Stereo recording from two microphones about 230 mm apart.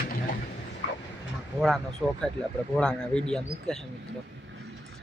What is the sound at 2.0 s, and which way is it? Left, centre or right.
Speech, centre.